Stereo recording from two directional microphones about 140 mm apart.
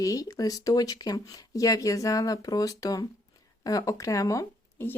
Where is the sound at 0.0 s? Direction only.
25° left (ahead or behind).